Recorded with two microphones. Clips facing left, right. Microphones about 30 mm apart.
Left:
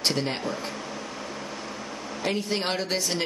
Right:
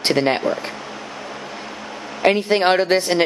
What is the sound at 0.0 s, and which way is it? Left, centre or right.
Speech, right.